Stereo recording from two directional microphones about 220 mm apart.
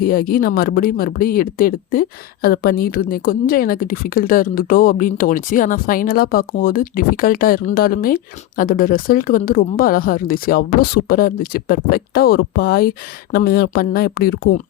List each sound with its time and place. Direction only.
0.0 s speech: 40° left (ahead or behind)